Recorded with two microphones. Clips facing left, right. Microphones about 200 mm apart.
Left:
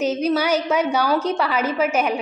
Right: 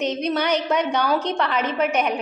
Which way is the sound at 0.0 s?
5° left (ahead or behind).